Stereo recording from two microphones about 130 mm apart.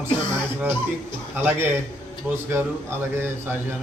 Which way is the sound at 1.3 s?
15° right (ahead or behind).